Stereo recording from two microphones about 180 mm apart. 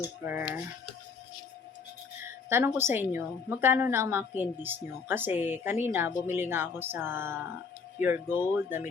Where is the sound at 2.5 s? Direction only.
15° right (ahead or behind).